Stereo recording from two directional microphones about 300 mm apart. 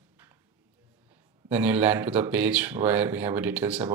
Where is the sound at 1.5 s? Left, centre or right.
Centre.